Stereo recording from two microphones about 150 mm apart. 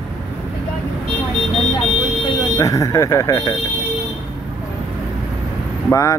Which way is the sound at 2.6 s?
20° left (ahead or behind).